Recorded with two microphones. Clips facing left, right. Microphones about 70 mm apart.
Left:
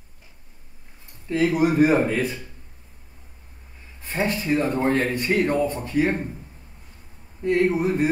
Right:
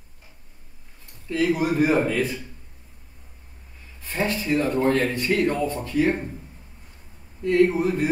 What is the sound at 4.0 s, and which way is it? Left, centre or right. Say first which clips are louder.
Speech: left 1 dB; left.